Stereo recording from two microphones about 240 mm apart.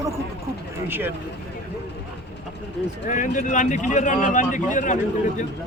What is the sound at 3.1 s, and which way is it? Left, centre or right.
Speech, left.